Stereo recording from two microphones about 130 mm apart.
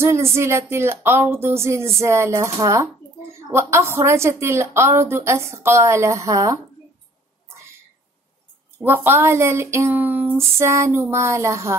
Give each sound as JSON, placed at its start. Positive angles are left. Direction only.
{"t": 0.0, "sound": "a woman's voice", "side_deg": -20}
{"t": 8.7, "sound": "a woman's voice", "side_deg": -15}